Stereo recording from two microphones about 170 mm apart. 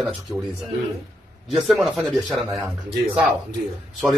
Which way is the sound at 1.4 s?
Centre (ahead or behind).